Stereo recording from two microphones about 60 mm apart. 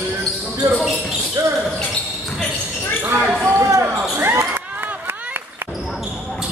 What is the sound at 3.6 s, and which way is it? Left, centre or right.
Basketball bounce, right.